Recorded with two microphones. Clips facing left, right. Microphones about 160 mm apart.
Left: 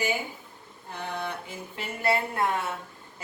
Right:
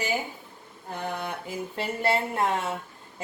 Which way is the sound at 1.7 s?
30° right (ahead or behind).